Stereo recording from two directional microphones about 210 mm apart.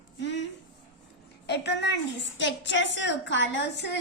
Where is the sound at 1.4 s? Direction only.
55° left (ahead or behind).